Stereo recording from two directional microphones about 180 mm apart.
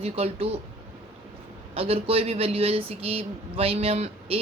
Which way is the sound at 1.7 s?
30° right (ahead or behind).